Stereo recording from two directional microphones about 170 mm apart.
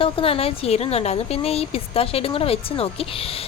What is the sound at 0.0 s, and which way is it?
A woman's voice, 35° left (ahead or behind).